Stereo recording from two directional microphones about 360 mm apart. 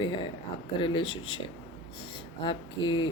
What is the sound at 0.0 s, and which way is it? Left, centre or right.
A woman's voice, centre.